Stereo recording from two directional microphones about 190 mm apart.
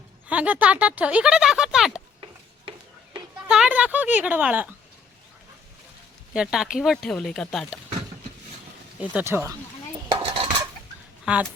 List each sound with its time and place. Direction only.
0.3 s speech: 10° right (ahead or behind)
3.5 s speech: 5° right (ahead or behind)
6.3 s speech: 5° right (ahead or behind)
9.0 s speech: 10° right (ahead or behind)
10.1 s cutlery: 25° right (ahead or behind)
11.3 s speech: 5° right (ahead or behind)